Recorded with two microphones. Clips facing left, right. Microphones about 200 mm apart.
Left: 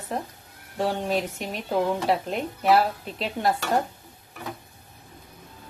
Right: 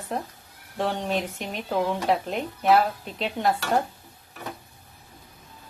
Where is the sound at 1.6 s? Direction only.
Centre (ahead or behind).